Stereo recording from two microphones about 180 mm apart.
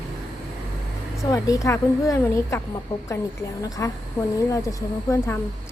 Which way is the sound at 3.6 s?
20° left (ahead or behind).